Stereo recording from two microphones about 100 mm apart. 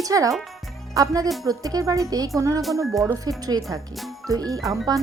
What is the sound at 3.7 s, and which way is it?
Speech, centre (ahead or behind).